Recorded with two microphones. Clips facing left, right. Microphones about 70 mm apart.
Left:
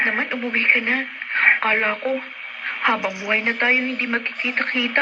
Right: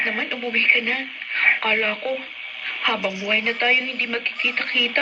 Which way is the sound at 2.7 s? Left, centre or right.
Left.